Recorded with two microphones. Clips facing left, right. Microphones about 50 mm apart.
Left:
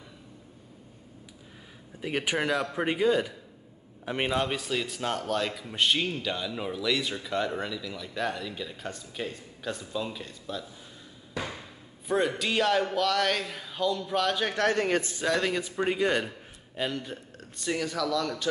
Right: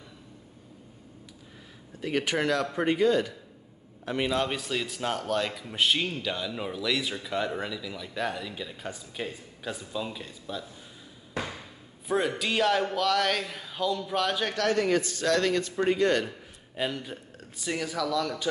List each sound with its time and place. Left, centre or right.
2.0 s a man's voice: centre
4.4 s speech: centre
12.1 s speech: centre
14.6 s speech: left
15.0 s a man's voice: centre
16.7 s speech: centre